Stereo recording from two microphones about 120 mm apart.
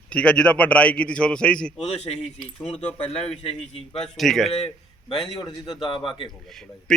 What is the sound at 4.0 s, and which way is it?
Speech, centre (ahead or behind).